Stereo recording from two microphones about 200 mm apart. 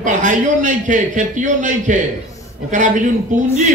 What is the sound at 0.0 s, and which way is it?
A man's voice, 40° right (ahead or behind).